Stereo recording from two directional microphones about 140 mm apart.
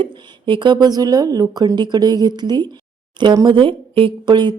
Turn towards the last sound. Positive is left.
turn(degrees=-30)  # may be behind; listen again after turning